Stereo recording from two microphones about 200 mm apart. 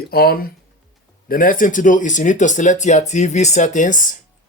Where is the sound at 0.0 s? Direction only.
50° left (ahead or behind).